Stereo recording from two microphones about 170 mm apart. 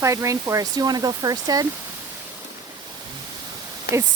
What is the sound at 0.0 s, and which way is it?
Speech, 20° right (ahead or behind).